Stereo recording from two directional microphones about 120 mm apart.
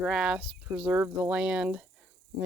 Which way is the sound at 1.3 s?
10° right (ahead or behind).